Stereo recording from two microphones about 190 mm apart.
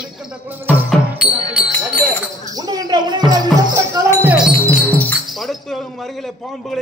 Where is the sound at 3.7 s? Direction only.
10° right (ahead or behind).